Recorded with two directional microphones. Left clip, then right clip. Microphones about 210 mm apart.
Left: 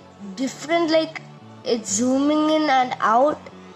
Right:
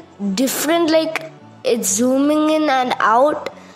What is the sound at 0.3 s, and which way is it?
A woman's voice, 35° right (ahead or behind).